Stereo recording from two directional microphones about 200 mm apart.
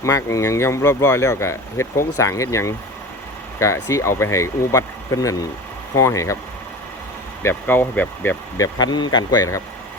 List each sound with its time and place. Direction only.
0.0 s speech: 15° left (ahead or behind)
7.4 s speech: 10° left (ahead or behind)